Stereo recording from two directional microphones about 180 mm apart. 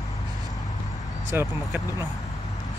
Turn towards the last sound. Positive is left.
turn(degrees=-15)  # may be behind; listen again after turning